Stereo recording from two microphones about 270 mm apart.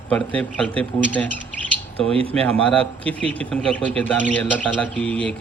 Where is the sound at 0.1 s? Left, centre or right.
Centre.